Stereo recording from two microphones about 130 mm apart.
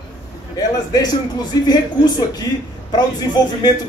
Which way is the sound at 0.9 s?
30° left (ahead or behind).